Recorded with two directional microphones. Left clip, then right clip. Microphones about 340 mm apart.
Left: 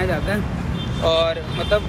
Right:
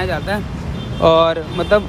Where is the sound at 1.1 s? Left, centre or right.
Centre.